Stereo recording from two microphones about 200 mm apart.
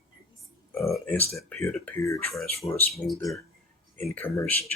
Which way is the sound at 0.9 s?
10° left (ahead or behind).